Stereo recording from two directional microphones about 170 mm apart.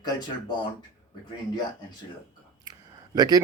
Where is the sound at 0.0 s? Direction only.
25° left (ahead or behind).